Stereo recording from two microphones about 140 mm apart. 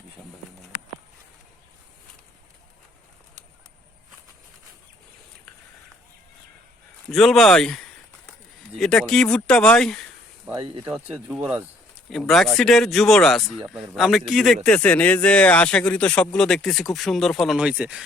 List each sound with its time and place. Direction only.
7.1 s speech: centre (ahead or behind)
10.5 s speech: 40° right (ahead or behind)
11.3 s speech: 5° right (ahead or behind)